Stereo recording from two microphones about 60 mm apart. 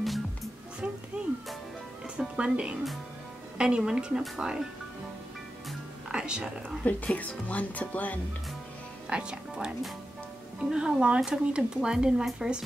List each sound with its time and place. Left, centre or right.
1.1 s music: centre
2.1 s speech: centre
6.0 s speech: centre
6.8 s speech: left
9.1 s speech: centre